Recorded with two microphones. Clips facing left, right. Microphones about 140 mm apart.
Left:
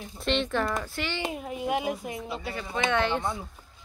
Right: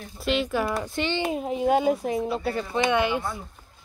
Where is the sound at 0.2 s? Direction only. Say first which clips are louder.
Right 2 dB; 5° right (ahead or behind).